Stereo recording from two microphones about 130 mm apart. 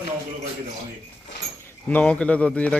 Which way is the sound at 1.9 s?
10° left (ahead or behind).